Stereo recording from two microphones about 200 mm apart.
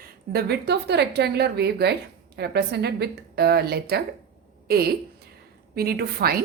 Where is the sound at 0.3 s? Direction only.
55° right (ahead or behind).